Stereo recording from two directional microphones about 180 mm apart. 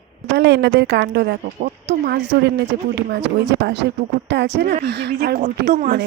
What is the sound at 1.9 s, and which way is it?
Speech, 80° right.